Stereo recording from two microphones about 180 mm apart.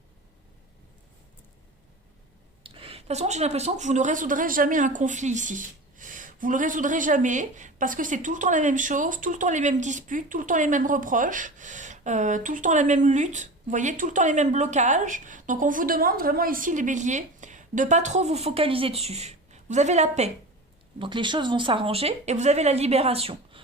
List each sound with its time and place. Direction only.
2.6 s speech: 30° right (ahead or behind)
21.0 s speech: 25° right (ahead or behind)